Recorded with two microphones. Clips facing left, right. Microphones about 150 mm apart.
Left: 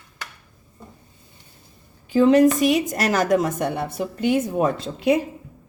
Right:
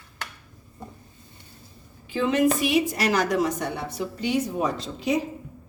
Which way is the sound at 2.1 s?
40° left (ahead or behind).